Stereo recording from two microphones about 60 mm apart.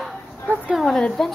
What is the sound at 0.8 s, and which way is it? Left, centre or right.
Speech, centre.